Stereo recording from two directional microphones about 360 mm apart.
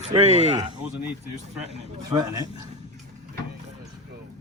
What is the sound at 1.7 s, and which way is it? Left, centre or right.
Speech, centre.